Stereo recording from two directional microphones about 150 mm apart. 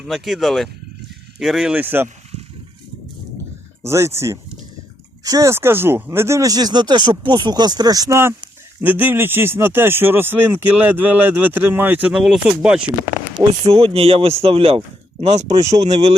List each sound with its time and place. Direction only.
0.0 s speech: centre (ahead or behind)
3.8 s speech: 15° right (ahead or behind)
13.3 s speech: 40° right (ahead or behind)